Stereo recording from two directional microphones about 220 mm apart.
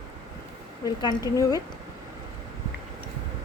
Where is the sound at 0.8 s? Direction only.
20° left (ahead or behind).